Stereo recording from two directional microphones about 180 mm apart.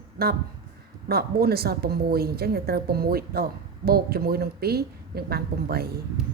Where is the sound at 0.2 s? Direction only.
60° right (ahead or behind).